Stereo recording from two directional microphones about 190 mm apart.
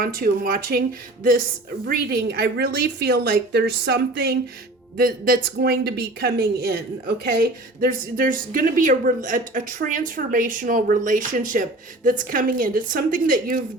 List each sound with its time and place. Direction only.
0.0 s a woman's voice: 50° right (ahead or behind)